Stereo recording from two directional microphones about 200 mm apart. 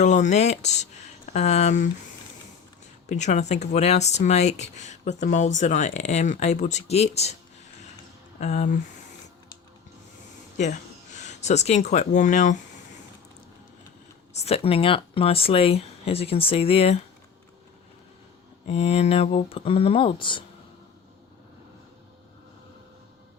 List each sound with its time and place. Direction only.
0.0 s speech: 35° left (ahead or behind)
3.1 s speech: 35° left (ahead or behind)
8.4 s speech: 35° left (ahead or behind)
11.2 s speech: 35° left (ahead or behind)
14.3 s speech: 30° left (ahead or behind)
18.7 s speech: 30° left (ahead or behind)